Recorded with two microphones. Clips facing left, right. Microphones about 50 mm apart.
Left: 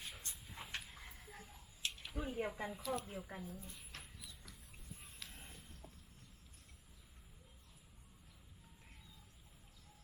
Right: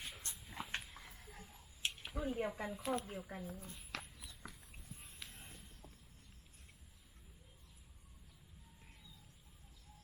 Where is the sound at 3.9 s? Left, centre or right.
Right.